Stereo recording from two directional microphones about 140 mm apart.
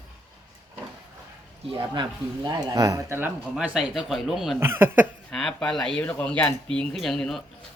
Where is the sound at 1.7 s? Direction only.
35° right (ahead or behind); by 3.3 s 20° right (ahead or behind).